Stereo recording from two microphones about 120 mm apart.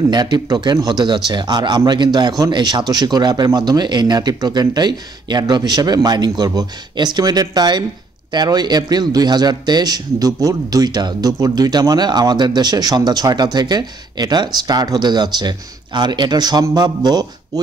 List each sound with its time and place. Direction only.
0.1 s a man's voice: 35° right (ahead or behind)